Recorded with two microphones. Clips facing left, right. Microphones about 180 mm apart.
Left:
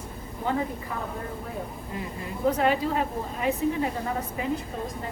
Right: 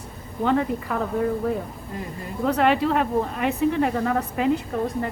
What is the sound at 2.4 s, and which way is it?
Speech, 70° right (ahead or behind).